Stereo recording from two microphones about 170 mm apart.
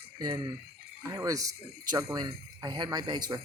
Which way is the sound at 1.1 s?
20° right (ahead or behind).